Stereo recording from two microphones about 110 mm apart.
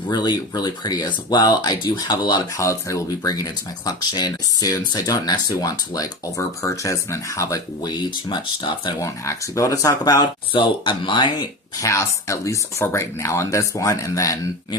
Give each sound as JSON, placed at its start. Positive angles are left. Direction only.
{"t": 0.1, "sound": "speech", "side_deg": 40}
{"t": 2.6, "sound": "speech", "side_deg": 30}
{"t": 9.0, "sound": "speech", "side_deg": 30}
{"t": 11.8, "sound": "speech", "side_deg": 30}